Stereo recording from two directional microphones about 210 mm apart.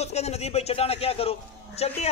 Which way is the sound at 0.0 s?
30° left (ahead or behind).